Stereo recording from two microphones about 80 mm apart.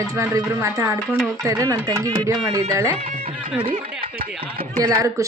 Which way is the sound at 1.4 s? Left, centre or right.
Right.